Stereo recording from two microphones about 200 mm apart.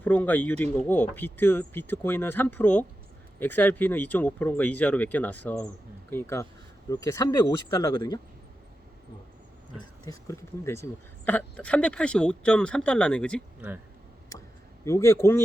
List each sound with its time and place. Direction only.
0.0 s speech: 10° left (ahead or behind)
10.1 s speech: 15° left (ahead or behind)
14.8 s speech: 15° left (ahead or behind)